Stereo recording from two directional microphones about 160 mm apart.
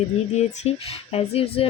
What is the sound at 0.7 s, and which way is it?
Speech, 40° left (ahead or behind).